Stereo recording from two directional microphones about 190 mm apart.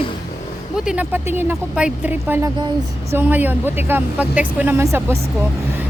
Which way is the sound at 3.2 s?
10° right (ahead or behind).